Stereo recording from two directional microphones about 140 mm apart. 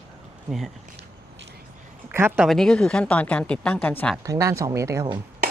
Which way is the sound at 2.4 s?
Centre (ahead or behind).